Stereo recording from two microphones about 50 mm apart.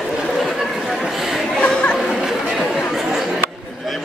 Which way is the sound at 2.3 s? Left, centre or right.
Centre.